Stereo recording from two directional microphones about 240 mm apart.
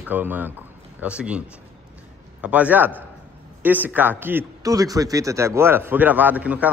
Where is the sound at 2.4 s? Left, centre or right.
Centre.